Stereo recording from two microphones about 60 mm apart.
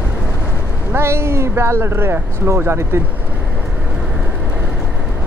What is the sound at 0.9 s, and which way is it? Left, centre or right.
Speech, right.